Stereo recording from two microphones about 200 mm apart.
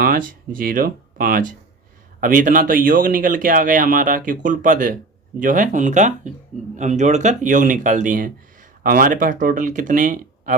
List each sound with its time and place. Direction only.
0.0 s speech: 45° right (ahead or behind)